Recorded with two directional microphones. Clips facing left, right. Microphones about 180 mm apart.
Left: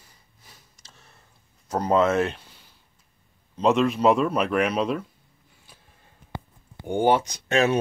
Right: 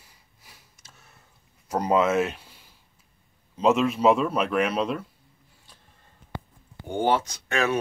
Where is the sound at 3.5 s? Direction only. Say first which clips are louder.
Left 1 dB; 5° right (ahead or behind).